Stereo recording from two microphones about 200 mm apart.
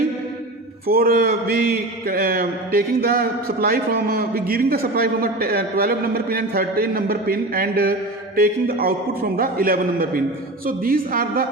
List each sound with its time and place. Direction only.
0.9 s mantra: 50° right (ahead or behind)